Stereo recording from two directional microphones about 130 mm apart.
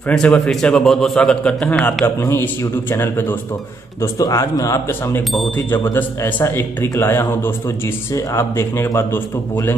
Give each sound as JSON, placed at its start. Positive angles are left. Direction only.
{"t": 0.1, "sound": "a man's voice", "side_deg": 5}